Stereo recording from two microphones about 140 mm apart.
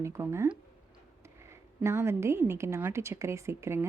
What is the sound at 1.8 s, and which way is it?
Speech, 20° right (ahead or behind).